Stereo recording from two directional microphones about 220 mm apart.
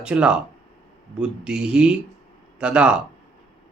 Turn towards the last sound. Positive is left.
turn(degrees=-5)  # may be behind; listen again after turning